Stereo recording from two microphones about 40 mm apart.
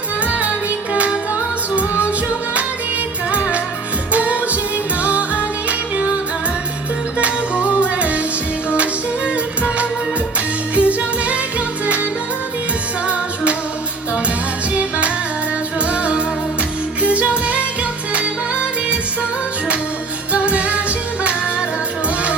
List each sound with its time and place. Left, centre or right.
0.3 s music: right
3.3 s music: right
7.2 s music: right
13.1 s music: right
14.7 s music: right
20.3 s music: right